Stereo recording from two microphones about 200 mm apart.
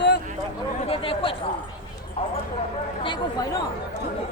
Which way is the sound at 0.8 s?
25° left (ahead or behind).